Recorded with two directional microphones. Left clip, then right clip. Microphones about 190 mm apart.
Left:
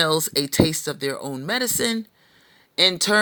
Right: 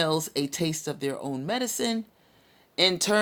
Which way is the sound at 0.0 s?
15° left (ahead or behind).